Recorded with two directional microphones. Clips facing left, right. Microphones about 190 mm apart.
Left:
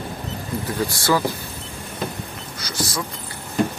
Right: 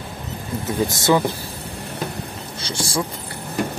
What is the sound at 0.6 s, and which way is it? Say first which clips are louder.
Speech: right 3 dB; 20° right (ahead or behind).